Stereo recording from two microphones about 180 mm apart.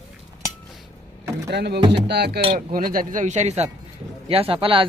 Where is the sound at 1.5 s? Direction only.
70° right (ahead or behind).